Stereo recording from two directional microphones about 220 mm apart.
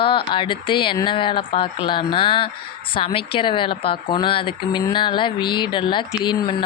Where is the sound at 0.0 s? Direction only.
20° left (ahead or behind).